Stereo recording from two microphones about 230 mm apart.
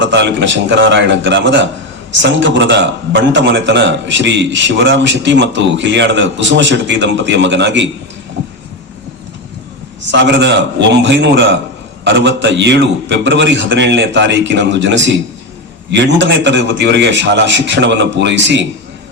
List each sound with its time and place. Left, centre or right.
0.0 s a man's voice: right
10.1 s a man's voice: right